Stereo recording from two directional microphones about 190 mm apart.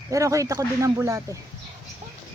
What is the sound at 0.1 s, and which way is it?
Speech, 15° right (ahead or behind).